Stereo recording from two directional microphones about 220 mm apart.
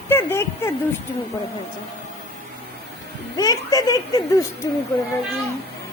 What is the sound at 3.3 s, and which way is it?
Speech, 15° left (ahead or behind).